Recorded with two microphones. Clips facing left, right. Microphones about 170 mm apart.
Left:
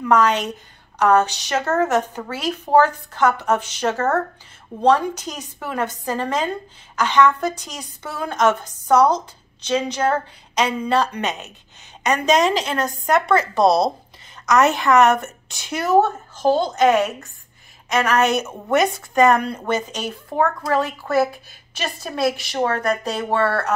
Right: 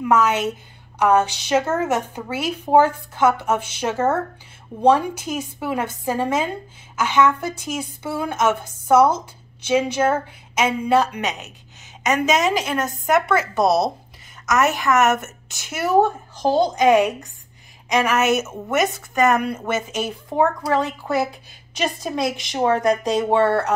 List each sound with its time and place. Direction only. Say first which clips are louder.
0.0 s a woman's voice: left 1 dB; 5° right (ahead or behind)